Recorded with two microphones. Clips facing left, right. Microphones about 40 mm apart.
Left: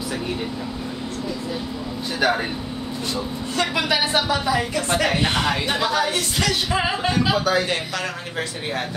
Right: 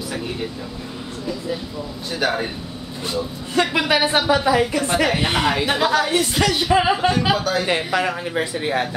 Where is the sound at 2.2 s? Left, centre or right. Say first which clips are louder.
Left 1 dB; centre.